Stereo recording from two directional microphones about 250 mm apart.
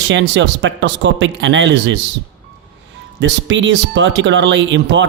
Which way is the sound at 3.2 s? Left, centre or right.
Right.